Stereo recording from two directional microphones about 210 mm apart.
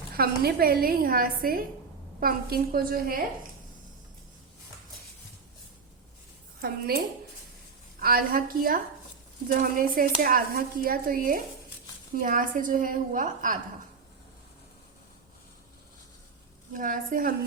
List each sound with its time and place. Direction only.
0.2 s speech: 45° right (ahead or behind)
6.6 s a woman's voice: 45° right (ahead or behind)
16.7 s a woman's voice: 40° right (ahead or behind)